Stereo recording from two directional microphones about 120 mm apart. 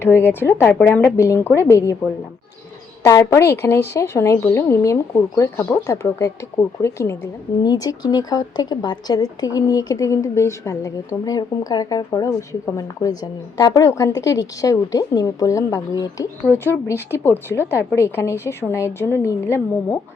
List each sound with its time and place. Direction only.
0.0 s a woman's voice: 20° left (ahead or behind)
1.1 s a woman's voice: 20° left (ahead or behind)
3.1 s a woman's voice: 25° left (ahead or behind)